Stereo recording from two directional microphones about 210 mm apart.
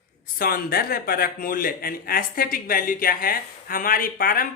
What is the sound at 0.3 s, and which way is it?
Speech, 45° left (ahead or behind).